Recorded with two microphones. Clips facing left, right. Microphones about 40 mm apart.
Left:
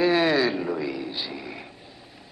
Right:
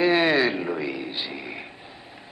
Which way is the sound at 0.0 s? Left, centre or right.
Right.